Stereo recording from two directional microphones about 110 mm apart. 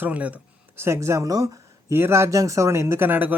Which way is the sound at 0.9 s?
25° right (ahead or behind).